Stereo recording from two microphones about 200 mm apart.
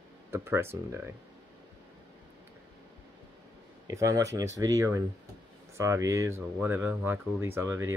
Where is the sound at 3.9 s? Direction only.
15° right (ahead or behind).